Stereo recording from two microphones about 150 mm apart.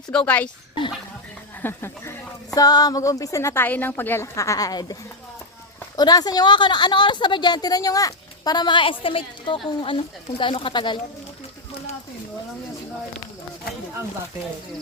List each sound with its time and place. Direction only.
0.1 s speech: 10° left (ahead or behind)
1.6 s a woman's voice: 15° left (ahead or behind)
6.0 s a woman's voice: 25° left (ahead or behind)